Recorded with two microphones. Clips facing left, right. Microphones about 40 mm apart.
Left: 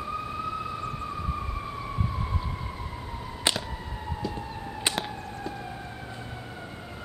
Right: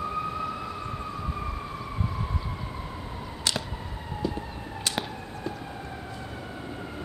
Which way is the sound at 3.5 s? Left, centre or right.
Left.